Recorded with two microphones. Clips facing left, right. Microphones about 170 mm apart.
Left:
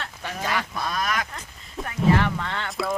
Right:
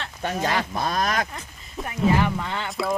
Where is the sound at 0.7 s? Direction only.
40° right (ahead or behind).